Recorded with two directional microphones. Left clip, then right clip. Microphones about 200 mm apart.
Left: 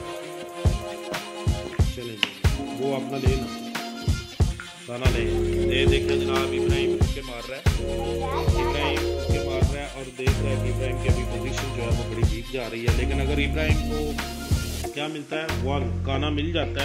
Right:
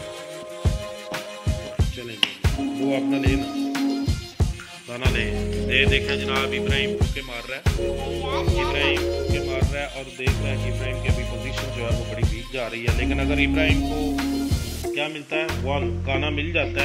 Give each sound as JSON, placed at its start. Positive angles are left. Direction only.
{"t": 1.8, "sound": "music", "side_deg": 0}
{"t": 5.0, "sound": "speech", "side_deg": 5}
{"t": 8.5, "sound": "music", "side_deg": 5}
{"t": 10.9, "sound": "speech", "side_deg": 0}
{"t": 15.6, "sound": "speech", "side_deg": 15}